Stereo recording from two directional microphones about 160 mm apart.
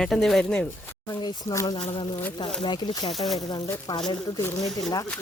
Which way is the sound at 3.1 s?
Centre (ahead or behind).